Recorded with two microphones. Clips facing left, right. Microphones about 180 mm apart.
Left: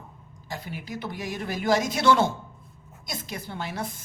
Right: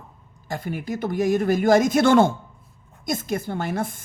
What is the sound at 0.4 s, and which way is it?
A woman's voice, 50° right (ahead or behind).